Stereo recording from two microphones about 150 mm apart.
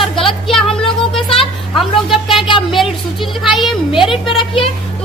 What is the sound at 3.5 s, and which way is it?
Speech, centre (ahead or behind).